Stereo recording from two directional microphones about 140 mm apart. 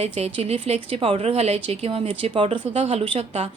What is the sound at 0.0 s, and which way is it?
A woman's voice, 55° right (ahead or behind).